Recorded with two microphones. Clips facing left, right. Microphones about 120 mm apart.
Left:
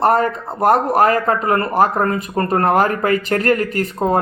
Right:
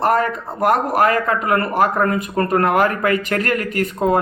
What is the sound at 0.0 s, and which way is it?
Speech, 35° left (ahead or behind).